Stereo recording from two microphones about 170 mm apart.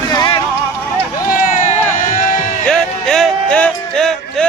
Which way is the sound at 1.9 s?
50° left (ahead or behind).